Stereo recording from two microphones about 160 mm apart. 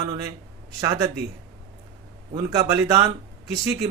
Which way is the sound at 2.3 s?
20° right (ahead or behind).